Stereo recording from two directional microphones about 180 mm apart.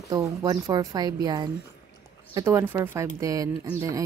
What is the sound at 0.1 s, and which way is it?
Speech, 20° right (ahead or behind).